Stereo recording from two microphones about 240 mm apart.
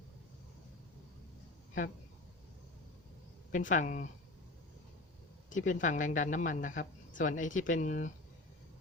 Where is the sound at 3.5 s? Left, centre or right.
Left.